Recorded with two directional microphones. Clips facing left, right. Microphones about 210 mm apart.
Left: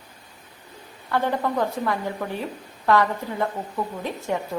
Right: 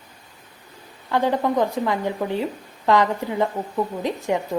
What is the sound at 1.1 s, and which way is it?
A woman's voice, 15° right (ahead or behind).